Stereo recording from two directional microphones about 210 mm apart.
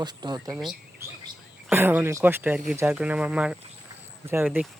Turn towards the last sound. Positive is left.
turn(degrees=-10)  # may be behind; listen again after turning